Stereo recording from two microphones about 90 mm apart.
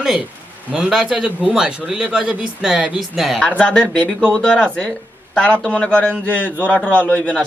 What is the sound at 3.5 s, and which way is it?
A man's voice, 10° left (ahead or behind).